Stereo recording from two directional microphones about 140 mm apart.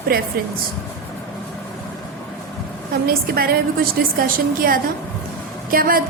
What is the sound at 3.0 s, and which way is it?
A woman's voice, 90° right.